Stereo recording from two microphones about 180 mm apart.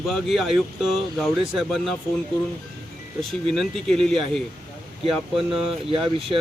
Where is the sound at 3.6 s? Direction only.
Centre (ahead or behind).